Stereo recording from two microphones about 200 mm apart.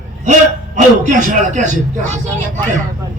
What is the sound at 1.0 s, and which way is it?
Speech, 40° right (ahead or behind).